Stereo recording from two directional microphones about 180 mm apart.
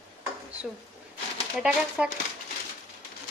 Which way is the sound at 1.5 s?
5° right (ahead or behind).